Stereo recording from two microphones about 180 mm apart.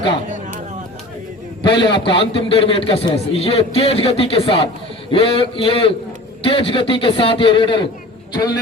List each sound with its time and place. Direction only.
1.6 s a man's voice: 25° left (ahead or behind)